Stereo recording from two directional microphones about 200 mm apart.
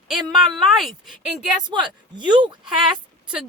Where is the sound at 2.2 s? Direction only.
25° right (ahead or behind).